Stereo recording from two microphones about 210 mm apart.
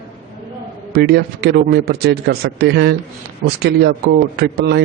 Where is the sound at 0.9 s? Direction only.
50° right (ahead or behind).